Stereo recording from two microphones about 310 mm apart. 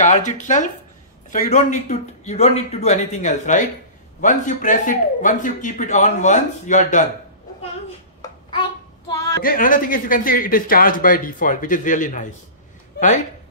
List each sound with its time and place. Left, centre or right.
0.0 s a man's voice: left
8.2 s child singing: centre
9.4 s a man's voice: left